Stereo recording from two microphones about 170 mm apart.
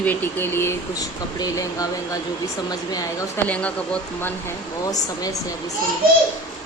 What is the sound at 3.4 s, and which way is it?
Speech, 10° left (ahead or behind).